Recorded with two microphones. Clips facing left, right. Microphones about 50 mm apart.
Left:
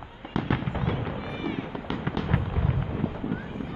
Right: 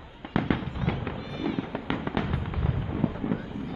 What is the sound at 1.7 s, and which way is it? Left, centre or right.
Fireworks, right.